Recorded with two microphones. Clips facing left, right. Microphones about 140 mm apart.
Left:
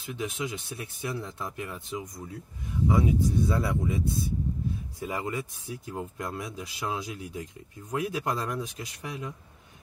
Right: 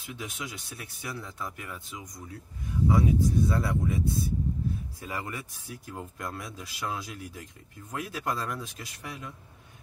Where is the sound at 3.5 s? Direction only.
20° left (ahead or behind).